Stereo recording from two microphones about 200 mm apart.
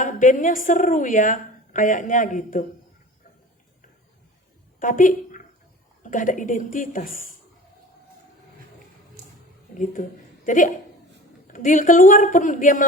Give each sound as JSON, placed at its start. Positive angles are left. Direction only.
{"t": 0.0, "sound": "a woman's voice", "side_deg": 40}
{"t": 4.8, "sound": "a woman's voice", "side_deg": 40}
{"t": 9.7, "sound": "a woman's voice", "side_deg": 40}